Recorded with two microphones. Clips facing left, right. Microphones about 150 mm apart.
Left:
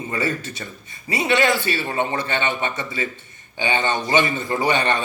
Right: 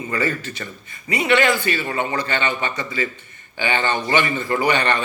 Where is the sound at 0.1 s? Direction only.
20° left (ahead or behind).